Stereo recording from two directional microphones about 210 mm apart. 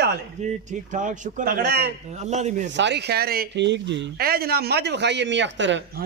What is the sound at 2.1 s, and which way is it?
Speech, 35° right (ahead or behind).